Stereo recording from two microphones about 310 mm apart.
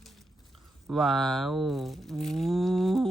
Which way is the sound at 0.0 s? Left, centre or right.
Centre.